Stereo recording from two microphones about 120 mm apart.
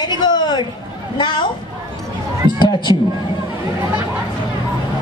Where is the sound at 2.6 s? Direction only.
40° left (ahead or behind).